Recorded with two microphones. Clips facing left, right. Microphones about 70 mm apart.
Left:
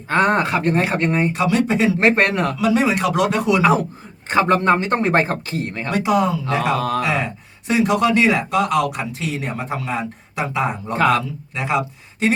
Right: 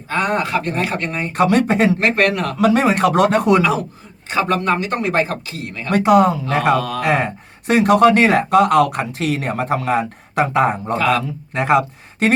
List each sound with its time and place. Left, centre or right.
0.1 s speech: left
0.5 s speech: left
1.3 s speech: right
2.0 s speech: left
2.6 s speech: right
4.3 s speech: left
5.9 s speech: right